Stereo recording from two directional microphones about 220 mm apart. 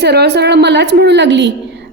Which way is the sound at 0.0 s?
50° right (ahead or behind).